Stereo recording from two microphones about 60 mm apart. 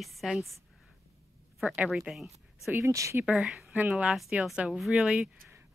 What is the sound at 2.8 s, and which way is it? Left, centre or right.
Speech, right.